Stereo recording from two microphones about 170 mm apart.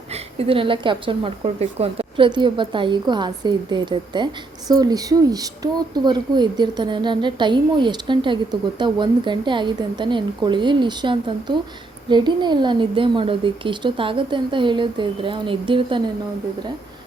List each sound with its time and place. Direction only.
0.1 s a woman's voice: 35° right (ahead or behind)